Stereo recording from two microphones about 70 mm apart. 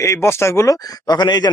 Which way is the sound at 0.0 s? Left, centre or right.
Left.